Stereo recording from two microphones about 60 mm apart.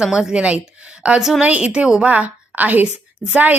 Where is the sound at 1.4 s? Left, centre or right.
Right.